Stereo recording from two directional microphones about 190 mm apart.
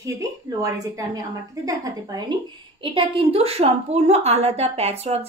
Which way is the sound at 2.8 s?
25° right (ahead or behind).